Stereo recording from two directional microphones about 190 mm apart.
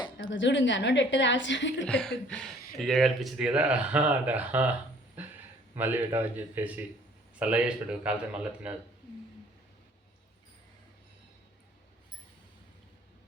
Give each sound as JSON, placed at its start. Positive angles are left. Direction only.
{"t": 0.2, "sound": "a woman's voice", "side_deg": 75}
{"t": 1.9, "sound": "speech", "side_deg": 5}
{"t": 5.2, "sound": "a sound", "side_deg": -10}
{"t": 5.7, "sound": "speech", "side_deg": -10}